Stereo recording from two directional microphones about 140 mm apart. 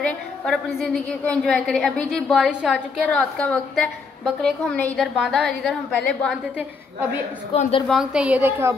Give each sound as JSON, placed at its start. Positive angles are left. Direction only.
{"t": 0.0, "sound": "a woman's voice", "side_deg": 0}
{"t": 7.5, "sound": "a woman's voice", "side_deg": 40}
{"t": 7.9, "sound": "a woman's voice", "side_deg": -5}